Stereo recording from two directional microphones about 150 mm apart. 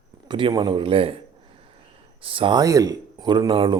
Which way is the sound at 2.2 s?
35° right (ahead or behind).